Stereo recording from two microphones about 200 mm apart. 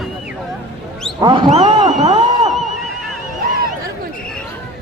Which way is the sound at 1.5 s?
30° right (ahead or behind).